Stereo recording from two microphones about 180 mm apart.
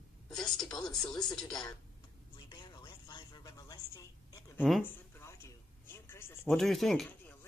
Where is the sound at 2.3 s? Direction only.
25° left (ahead or behind).